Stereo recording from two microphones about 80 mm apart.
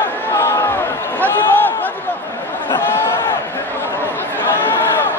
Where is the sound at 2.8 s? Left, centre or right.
Left.